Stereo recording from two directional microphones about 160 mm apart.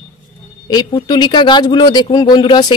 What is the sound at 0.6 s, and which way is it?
Speech, 25° left (ahead or behind).